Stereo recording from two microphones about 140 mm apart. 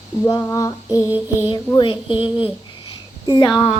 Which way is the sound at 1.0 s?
15° right (ahead or behind).